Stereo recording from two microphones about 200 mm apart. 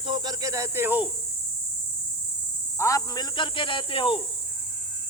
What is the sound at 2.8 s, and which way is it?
Speech, 15° left (ahead or behind).